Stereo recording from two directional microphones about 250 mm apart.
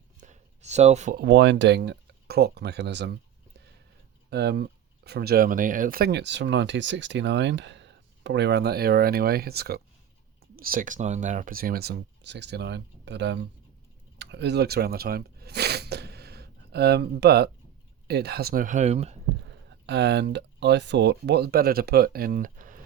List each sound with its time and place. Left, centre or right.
0.2 s speech: right
4.3 s speech: right
14.2 s a sound: right
18.1 s speech: right
19.9 s speech: right